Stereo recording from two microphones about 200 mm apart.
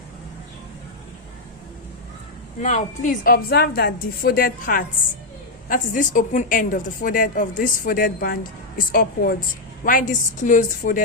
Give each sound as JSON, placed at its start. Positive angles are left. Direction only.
{"t": 2.6, "sound": "a woman's voice", "side_deg": 35}